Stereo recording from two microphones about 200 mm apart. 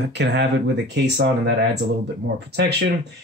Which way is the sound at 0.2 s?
60° right (ahead or behind).